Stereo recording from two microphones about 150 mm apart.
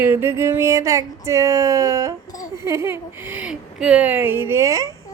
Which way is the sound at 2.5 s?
20° right (ahead or behind).